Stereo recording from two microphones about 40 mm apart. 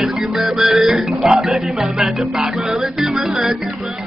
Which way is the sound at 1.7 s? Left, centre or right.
Right.